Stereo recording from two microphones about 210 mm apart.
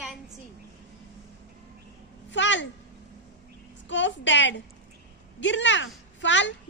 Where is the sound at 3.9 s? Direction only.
60° left (ahead or behind).